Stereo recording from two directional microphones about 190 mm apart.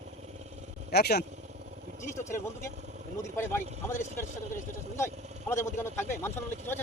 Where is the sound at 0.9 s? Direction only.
55° left (ahead or behind).